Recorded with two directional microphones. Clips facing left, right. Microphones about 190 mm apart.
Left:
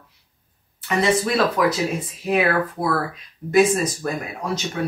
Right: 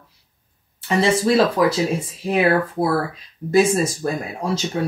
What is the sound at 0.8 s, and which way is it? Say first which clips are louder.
Speech: right 3 dB; 30° right (ahead or behind).